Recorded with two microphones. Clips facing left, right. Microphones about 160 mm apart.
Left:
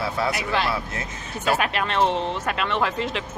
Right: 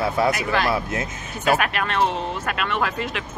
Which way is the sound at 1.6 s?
25° left (ahead or behind).